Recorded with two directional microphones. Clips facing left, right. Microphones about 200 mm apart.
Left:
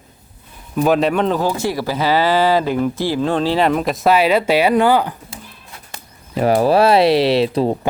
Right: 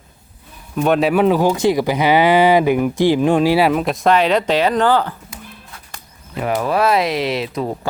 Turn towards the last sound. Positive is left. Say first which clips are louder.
# left 6 dB
turn(degrees=30)  # may be behind; listen again after turning